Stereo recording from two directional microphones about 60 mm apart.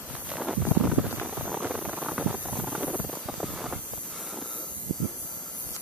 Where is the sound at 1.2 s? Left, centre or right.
Right.